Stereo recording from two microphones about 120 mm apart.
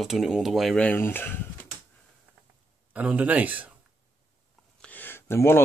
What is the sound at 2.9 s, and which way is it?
Speech, 10° right (ahead or behind).